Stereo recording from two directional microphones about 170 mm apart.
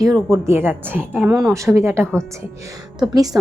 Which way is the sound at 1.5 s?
15° right (ahead or behind).